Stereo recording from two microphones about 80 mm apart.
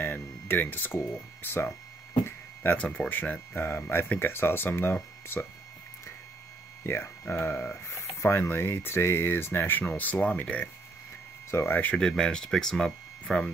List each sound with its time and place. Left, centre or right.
0.0 s speech: left
2.2 s a sound: left
2.8 s speech: centre
3.1 s speech: left
6.8 s speech: left
11.5 s speech: left
11.8 s speech: centre